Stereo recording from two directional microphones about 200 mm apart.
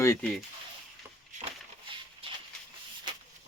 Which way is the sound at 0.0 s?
15° left (ahead or behind).